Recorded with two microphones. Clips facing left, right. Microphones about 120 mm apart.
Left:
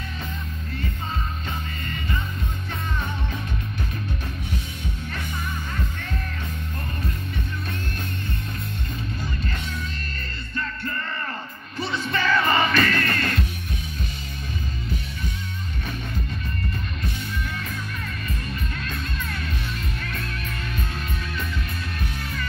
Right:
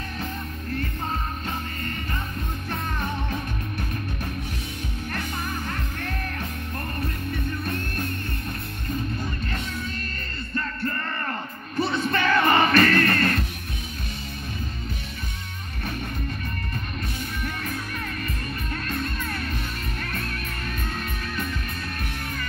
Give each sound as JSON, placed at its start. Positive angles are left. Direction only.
{"t": 11.8, "sound": "music", "side_deg": -50}
{"t": 19.2, "sound": "music", "side_deg": -45}